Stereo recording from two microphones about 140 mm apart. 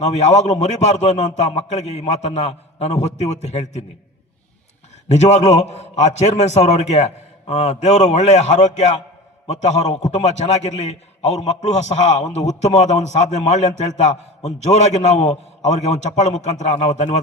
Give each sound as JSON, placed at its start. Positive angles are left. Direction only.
{"t": 0.0, "sound": "a man's voice", "side_deg": 50}
{"t": 5.0, "sound": "a man's voice", "side_deg": 55}